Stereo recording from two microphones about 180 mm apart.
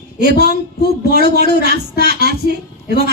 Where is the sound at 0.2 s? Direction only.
65° right (ahead or behind).